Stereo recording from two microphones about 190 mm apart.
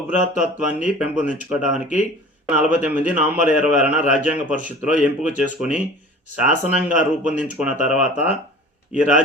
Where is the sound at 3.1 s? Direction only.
5° right (ahead or behind).